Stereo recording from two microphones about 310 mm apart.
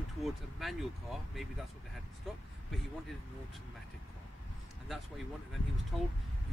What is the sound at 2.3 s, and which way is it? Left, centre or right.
Speech, centre.